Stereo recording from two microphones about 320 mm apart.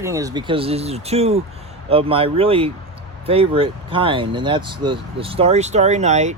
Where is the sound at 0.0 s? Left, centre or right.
Centre.